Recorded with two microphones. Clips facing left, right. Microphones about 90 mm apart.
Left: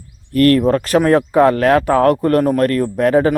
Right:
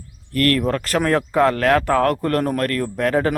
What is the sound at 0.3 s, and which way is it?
Speech, 15° left (ahead or behind).